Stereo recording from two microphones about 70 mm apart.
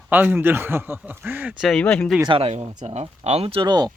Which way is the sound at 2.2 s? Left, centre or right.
Right.